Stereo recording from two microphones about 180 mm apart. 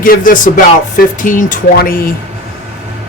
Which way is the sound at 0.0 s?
50° left (ahead or behind).